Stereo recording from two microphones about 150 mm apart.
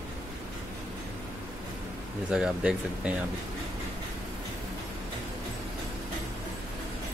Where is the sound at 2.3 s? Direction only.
5° right (ahead or behind).